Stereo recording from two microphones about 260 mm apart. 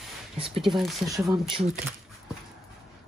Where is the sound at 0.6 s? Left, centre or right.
Centre.